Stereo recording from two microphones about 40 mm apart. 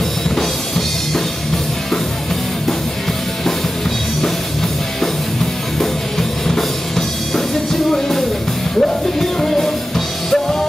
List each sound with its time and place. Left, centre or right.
0.4 s music: centre
5.0 s music: centre